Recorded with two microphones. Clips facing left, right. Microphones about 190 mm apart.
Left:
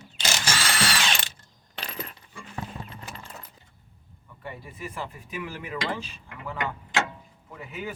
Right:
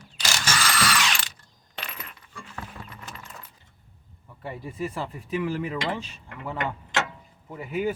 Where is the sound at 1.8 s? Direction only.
30° left (ahead or behind).